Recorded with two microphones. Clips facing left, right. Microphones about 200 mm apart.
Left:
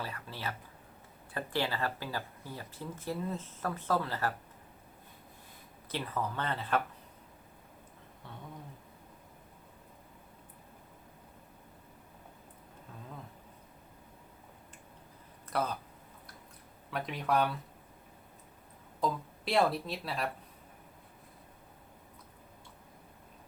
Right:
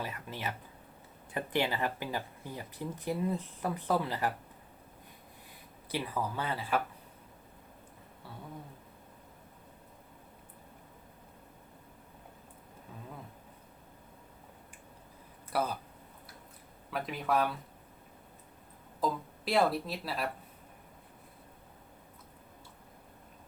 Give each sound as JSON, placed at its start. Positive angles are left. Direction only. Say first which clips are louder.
{"t": 0.0, "sound": "speech", "louder": "right 1 dB", "side_deg": -20}
{"t": 5.9, "sound": "speech", "louder": "right 1 dB", "side_deg": -10}
{"t": 15.4, "sound": "speech", "louder": "right 1 dB", "side_deg": -10}
{"t": 16.9, "sound": "speech", "louder": "even", "side_deg": 0}
{"t": 18.9, "sound": "speech", "louder": "even", "side_deg": 0}